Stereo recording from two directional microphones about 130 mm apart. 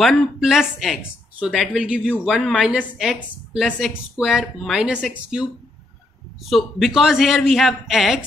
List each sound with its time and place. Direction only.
0.0 s speech: centre (ahead or behind)